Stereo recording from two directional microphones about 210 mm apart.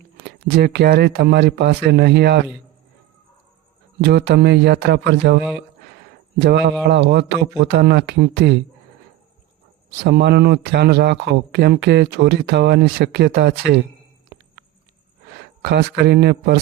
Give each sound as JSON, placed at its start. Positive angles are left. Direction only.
{"t": 0.2, "sound": "a man's voice", "side_deg": -50}
{"t": 4.0, "sound": "a man's voice", "side_deg": -50}
{"t": 6.4, "sound": "a man's voice", "side_deg": -50}
{"t": 9.9, "sound": "a man's voice", "side_deg": -55}
{"t": 15.6, "sound": "a man's voice", "side_deg": -50}